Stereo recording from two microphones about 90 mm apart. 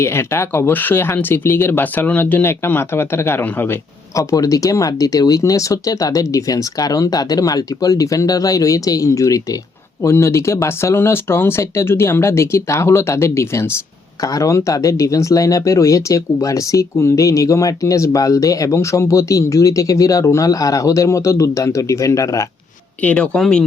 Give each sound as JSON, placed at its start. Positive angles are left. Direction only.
{"t": 0.0, "sound": "speech", "side_deg": 30}
{"t": 4.1, "sound": "speech", "side_deg": 35}
{"t": 23.0, "sound": "speech", "side_deg": 15}